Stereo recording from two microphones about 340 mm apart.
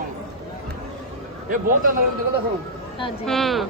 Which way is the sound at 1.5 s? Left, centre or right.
Right.